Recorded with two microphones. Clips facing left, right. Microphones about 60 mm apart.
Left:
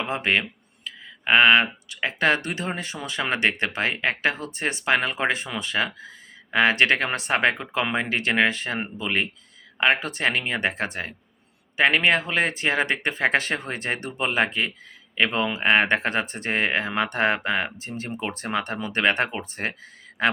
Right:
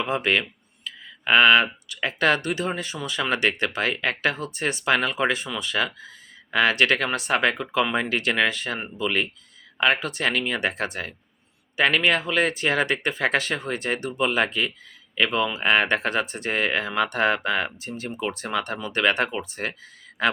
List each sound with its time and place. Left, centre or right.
0.0 s speech: left